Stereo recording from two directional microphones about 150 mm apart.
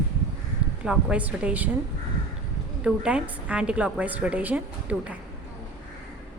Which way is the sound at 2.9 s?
5° right (ahead or behind).